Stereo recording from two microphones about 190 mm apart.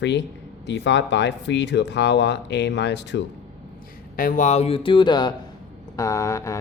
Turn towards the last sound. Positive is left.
turn(degrees=15)  # may be behind; listen again after turning